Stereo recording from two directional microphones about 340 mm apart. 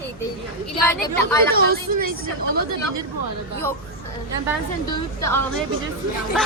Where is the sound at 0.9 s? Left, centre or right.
Centre.